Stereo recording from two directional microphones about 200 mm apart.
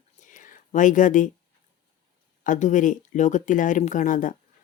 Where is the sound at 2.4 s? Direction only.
40° left (ahead or behind).